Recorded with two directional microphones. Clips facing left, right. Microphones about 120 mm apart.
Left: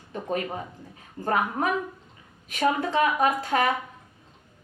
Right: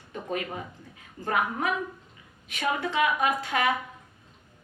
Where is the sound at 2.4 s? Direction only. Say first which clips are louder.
Left 4 dB; 40° left (ahead or behind).